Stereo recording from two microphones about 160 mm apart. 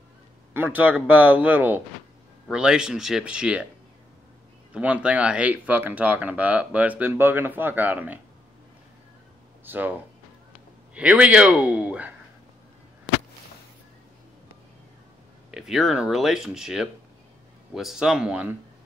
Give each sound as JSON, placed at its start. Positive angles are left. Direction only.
{"t": 0.5, "sound": "speech", "side_deg": -10}
{"t": 4.7, "sound": "speech", "side_deg": -10}
{"t": 9.7, "sound": "speech", "side_deg": -10}
{"t": 11.0, "sound": "speech", "side_deg": -5}
{"t": 15.5, "sound": "speech", "side_deg": 0}